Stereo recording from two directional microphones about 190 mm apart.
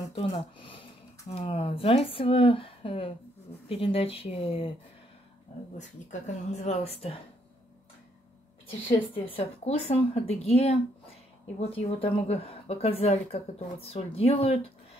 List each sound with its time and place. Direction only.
0.1 s a woman's voice: 30° left (ahead or behind)
5.8 s a woman's voice: 35° left (ahead or behind)
8.8 s a woman's voice: 30° left (ahead or behind)